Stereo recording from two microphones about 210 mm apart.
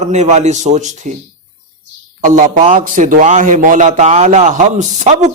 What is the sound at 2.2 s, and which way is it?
A man's voice, 35° right (ahead or behind).